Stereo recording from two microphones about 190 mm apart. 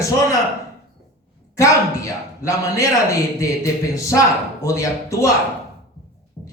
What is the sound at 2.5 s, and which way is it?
A man's voice, 15° left (ahead or behind).